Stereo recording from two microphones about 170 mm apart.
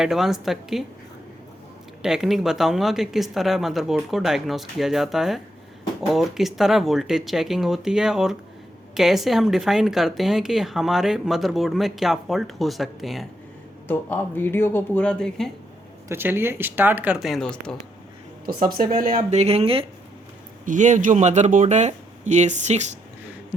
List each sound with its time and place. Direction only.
0.0 s speech: centre (ahead or behind)
2.0 s speech: 5° right (ahead or behind)
13.8 s speech: 10° left (ahead or behind)
16.0 s speech: 15° right (ahead or behind); by 17.7 s 5° left (ahead or behind)
18.4 s speech: 60° right (ahead or behind); by 19.8 s 35° right (ahead or behind)
20.7 s speech: 45° right (ahead or behind)